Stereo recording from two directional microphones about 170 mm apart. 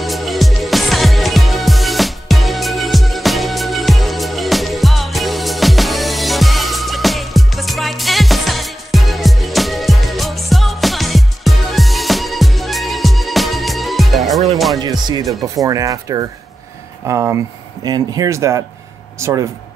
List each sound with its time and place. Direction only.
0.0 s music: centre (ahead or behind)
14.8 s speech: 25° right (ahead or behind)